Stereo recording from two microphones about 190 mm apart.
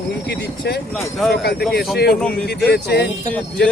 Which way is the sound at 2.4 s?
60° left (ahead or behind).